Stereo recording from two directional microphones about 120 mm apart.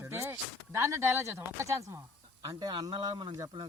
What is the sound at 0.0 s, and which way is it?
Speech, 20° right (ahead or behind).